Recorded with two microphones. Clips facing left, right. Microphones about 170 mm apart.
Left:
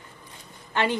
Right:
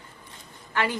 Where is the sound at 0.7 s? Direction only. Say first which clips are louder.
Left 2 dB; 25° left (ahead or behind).